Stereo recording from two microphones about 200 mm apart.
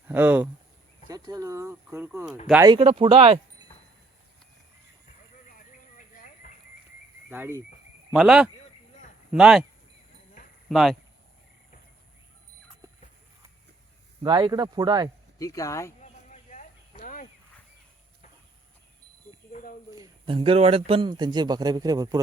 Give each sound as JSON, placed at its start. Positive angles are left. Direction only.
{"t": 0.1, "sound": "speech", "side_deg": -10}
{"t": 1.0, "sound": "speech", "side_deg": -20}
{"t": 2.6, "sound": "a man's voice", "side_deg": -30}
{"t": 6.4, "sound": "livestock", "side_deg": 35}
{"t": 7.3, "sound": "speech", "side_deg": -10}
{"t": 8.5, "sound": "a sound", "side_deg": 35}
{"t": 9.3, "sound": "speech", "side_deg": -5}
{"t": 10.7, "sound": "speech", "side_deg": 0}
{"t": 14.2, "sound": "a man's voice", "side_deg": -20}
{"t": 15.4, "sound": "speech", "side_deg": 15}
{"t": 16.0, "sound": "a sound", "side_deg": 35}
{"t": 20.0, "sound": "a man's voice", "side_deg": -25}